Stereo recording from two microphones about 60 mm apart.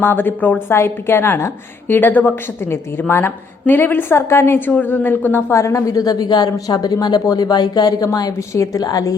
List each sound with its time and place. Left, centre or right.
0.0 s a woman's voice: left
0.7 s a woman's voice: left
1.9 s a woman's voice: left
5.5 s a woman's voice: left
8.3 s a woman's voice: left